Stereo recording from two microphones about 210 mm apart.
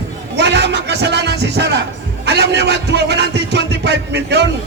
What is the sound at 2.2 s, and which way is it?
A man's voice, 55° right (ahead or behind).